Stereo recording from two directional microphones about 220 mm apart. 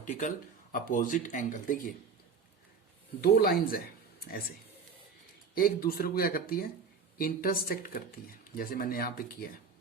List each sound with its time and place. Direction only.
0.0 s speech: 35° left (ahead or behind)
3.2 s speech: 45° left (ahead or behind)
5.5 s speech: 40° left (ahead or behind)